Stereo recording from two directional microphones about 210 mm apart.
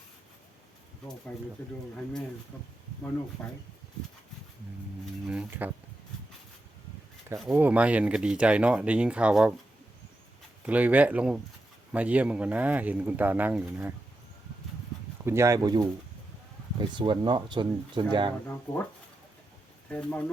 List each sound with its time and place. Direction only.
3.4 s speech: 5° left (ahead or behind)
5.2 s a sound: 5° right (ahead or behind)
7.3 s speech: 5° right (ahead or behind)
10.7 s speech: 5° right (ahead or behind)
15.2 s speech: 10° right (ahead or behind)
19.9 s speech: 5° left (ahead or behind)